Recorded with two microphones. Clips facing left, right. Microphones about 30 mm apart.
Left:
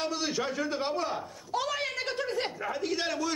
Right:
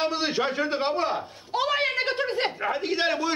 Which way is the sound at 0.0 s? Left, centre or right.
Right.